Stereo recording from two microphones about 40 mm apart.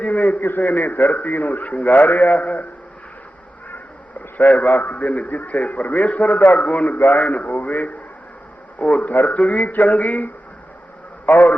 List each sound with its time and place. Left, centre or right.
0.0 s a man's voice: left
4.4 s a man's voice: left
11.3 s a man's voice: left